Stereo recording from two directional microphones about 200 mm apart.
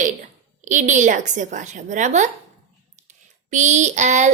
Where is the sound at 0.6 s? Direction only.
35° right (ahead or behind).